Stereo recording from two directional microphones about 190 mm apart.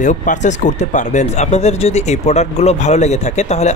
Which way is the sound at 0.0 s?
40° left (ahead or behind).